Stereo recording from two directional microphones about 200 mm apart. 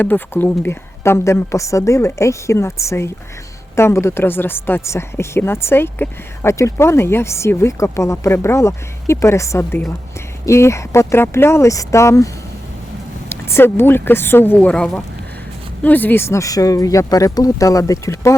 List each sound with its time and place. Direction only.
0.0 s a woman's voice: 10° left (ahead or behind)
13.3 s a woman's voice: 10° left (ahead or behind)